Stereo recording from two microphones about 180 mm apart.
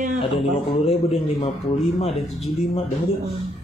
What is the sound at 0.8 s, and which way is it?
Speech, 35° left (ahead or behind).